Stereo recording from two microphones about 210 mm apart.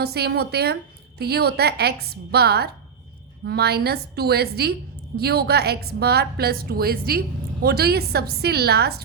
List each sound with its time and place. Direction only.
0.0 s a woman's voice: 50° right (ahead or behind)